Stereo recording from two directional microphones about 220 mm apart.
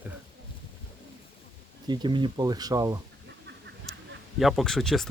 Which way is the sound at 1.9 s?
20° right (ahead or behind).